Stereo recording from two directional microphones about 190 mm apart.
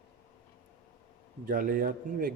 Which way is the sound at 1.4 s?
45° right (ahead or behind).